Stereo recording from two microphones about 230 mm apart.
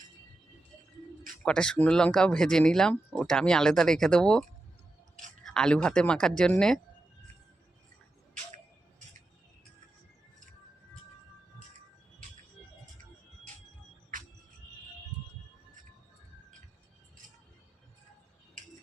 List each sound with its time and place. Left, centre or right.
1.5 s speech: centre
14.1 s music: right